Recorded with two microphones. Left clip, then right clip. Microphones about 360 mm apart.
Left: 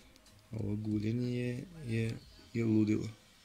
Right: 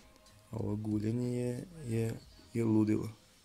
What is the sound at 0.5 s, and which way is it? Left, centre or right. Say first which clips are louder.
Speech: right 1 dB; right.